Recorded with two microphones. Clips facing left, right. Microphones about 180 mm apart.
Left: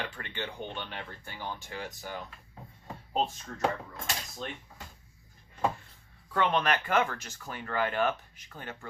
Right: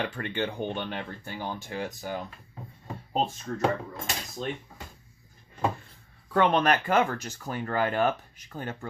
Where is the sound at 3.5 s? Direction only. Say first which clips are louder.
Right 10 dB; 40° right (ahead or behind).